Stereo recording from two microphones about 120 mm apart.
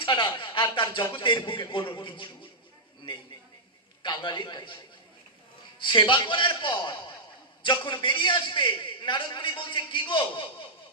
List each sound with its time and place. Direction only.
0.0 s a man's voice: 40° left (ahead or behind)
4.0 s a man's voice: 40° left (ahead or behind)
5.8 s a man's voice: 40° left (ahead or behind)